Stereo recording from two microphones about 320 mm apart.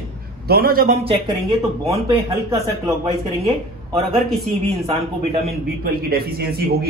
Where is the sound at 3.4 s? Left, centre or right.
Centre.